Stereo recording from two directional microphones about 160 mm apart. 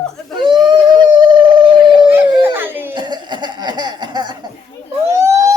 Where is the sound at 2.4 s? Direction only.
15° right (ahead or behind).